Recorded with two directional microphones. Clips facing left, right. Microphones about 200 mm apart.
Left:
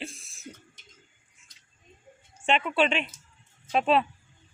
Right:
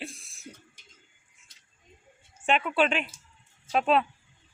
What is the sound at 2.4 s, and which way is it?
Speech, centre (ahead or behind).